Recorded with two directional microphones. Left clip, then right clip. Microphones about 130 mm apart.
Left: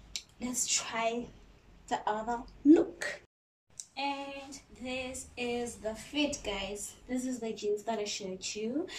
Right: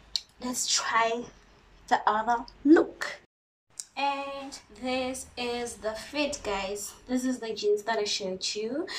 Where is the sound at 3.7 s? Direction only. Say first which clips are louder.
Right 6 dB; 25° left (ahead or behind).